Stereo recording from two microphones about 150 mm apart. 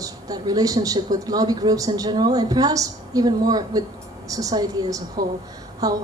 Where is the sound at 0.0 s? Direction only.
25° right (ahead or behind).